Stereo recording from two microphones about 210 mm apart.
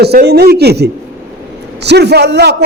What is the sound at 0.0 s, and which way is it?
A man's voice, 50° right (ahead or behind).